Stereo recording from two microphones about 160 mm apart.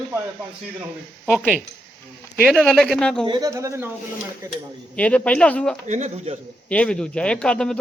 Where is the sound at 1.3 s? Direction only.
5° right (ahead or behind).